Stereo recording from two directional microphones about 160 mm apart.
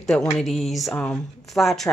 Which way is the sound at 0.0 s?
5° left (ahead or behind).